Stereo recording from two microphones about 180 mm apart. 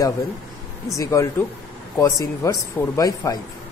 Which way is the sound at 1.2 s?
15° left (ahead or behind).